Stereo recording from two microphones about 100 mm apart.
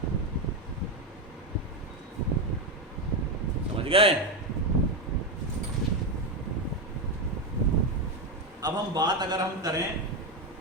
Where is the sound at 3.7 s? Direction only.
70° right (ahead or behind).